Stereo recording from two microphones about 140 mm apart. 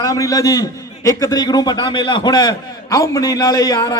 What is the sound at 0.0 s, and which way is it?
A man's voice, 25° left (ahead or behind).